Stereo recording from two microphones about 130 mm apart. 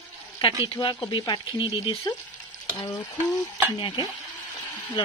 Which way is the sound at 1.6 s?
50° left (ahead or behind).